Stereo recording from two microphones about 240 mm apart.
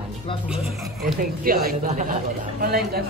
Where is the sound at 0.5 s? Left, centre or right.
Centre.